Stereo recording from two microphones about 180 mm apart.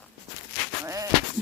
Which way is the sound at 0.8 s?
20° right (ahead or behind).